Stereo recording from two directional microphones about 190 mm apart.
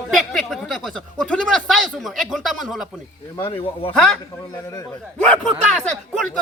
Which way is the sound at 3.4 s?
30° left (ahead or behind).